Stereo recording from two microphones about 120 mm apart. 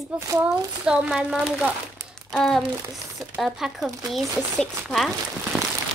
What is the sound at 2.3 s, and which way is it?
Speech, 5° left (ahead or behind).